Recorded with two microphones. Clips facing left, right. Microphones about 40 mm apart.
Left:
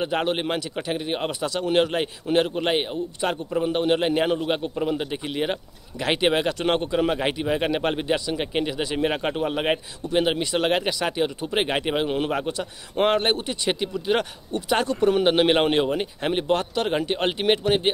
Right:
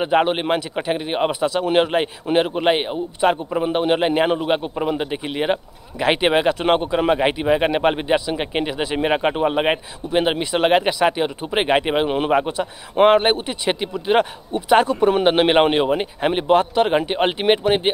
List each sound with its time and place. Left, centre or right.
0.0 s a man's voice: right